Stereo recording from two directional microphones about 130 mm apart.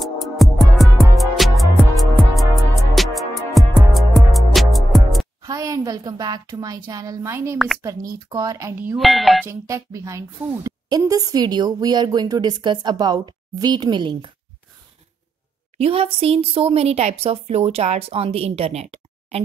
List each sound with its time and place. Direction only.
0.0 s music: centre (ahead or behind)
5.4 s a woman's voice: 25° right (ahead or behind)
7.5 s speech: centre (ahead or behind)
7.8 s speech: 25° right (ahead or behind)
8.9 s speech: centre (ahead or behind)
9.5 s speech: 25° right (ahead or behind)
15.8 s speech: 45° right (ahead or behind)